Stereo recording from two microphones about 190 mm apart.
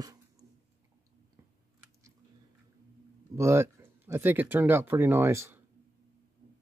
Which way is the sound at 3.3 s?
15° right (ahead or behind).